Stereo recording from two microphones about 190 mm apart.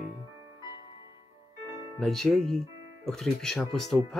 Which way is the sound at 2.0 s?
Centre (ahead or behind).